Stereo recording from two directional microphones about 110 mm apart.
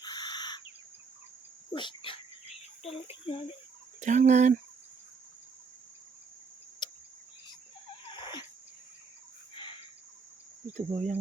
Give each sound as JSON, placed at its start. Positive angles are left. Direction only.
{"t": 0.0, "sound": "bird", "side_deg": 40}
{"t": 1.7, "sound": "speech", "side_deg": 45}
{"t": 4.0, "sound": "fowl", "side_deg": -90}
{"t": 6.8, "sound": "cricket", "side_deg": 40}
{"t": 8.1, "sound": "a sound", "side_deg": 45}
{"t": 10.8, "sound": "fowl", "side_deg": -90}